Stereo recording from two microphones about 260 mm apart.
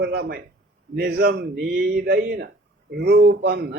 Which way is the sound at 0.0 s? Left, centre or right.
Right.